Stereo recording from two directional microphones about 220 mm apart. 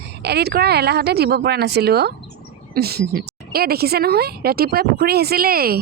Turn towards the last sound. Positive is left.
turn(degrees=-45)  # may be behind; listen again after turning